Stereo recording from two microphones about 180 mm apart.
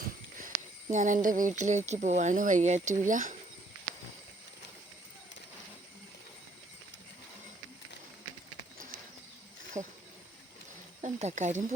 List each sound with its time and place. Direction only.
0.4 s speech: 45° right (ahead or behind)
9.7 s speech: 20° right (ahead or behind)
11.0 s speech: 40° right (ahead or behind)